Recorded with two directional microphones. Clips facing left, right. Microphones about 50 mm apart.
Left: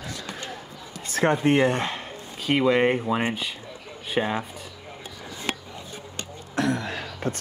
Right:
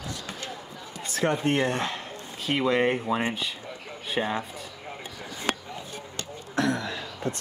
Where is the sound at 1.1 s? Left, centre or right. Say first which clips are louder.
Left 4 dB; left.